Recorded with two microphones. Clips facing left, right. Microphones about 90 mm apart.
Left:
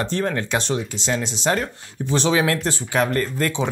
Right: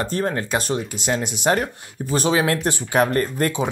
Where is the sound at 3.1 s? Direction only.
30° right (ahead or behind).